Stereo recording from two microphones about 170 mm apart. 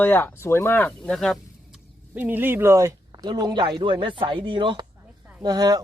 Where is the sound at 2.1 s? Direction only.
10° right (ahead or behind).